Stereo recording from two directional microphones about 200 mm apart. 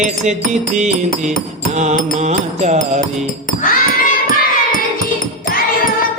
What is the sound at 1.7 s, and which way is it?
Music, 35° right (ahead or behind).